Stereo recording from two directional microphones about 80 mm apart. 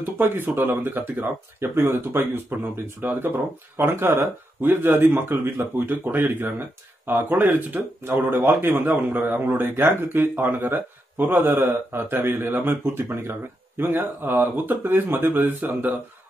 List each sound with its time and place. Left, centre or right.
0.2 s speech: right